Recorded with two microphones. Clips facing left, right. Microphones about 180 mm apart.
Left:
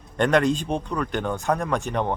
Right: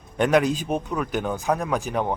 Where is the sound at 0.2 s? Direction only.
5° right (ahead or behind).